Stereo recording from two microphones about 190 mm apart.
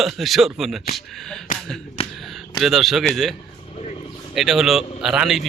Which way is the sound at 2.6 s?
Centre (ahead or behind).